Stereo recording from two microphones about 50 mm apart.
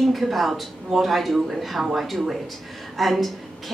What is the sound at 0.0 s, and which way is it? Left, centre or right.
A woman's voice, centre.